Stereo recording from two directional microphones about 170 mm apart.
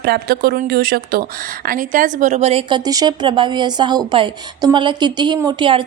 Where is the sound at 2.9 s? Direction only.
25° right (ahead or behind).